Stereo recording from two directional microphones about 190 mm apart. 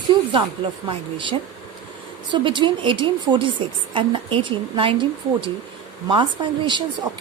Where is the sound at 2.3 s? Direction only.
25° right (ahead or behind).